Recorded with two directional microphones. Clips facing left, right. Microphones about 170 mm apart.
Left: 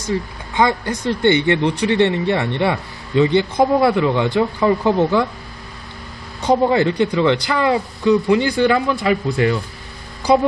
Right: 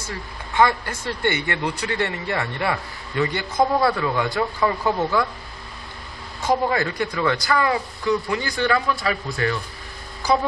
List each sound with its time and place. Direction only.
0.6 s speech: 15° left (ahead or behind)
6.7 s speech: 25° left (ahead or behind)